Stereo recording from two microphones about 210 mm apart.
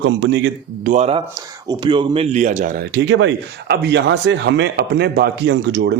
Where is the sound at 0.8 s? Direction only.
35° right (ahead or behind); by 5.9 s 55° right (ahead or behind).